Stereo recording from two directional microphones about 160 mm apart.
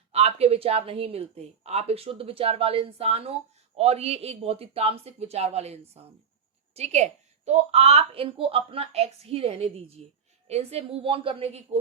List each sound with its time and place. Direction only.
0.1 s speech: 40° right (ahead or behind)